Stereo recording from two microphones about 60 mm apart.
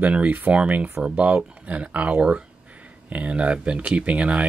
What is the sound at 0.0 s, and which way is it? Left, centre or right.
Speech, right.